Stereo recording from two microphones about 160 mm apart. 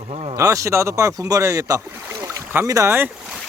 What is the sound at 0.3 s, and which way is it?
Speech, 20° right (ahead or behind).